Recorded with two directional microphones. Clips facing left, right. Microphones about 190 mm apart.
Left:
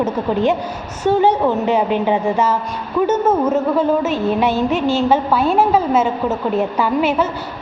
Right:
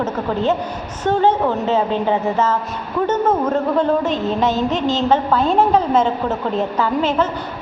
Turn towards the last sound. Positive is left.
turn(degrees=10)  # may be behind; listen again after turning